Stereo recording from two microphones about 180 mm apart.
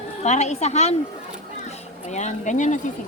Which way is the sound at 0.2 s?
40° left (ahead or behind).